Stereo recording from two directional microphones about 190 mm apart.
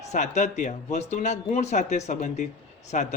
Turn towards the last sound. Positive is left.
turn(degrees=40)  # may be behind; listen again after turning